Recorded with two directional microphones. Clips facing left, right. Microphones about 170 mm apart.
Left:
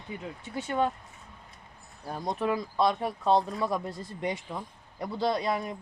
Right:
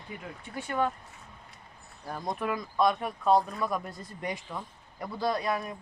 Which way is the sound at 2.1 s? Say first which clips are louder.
Left 3 dB; 25° left (ahead or behind).